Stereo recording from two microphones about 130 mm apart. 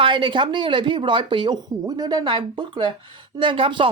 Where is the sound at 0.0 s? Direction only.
35° right (ahead or behind).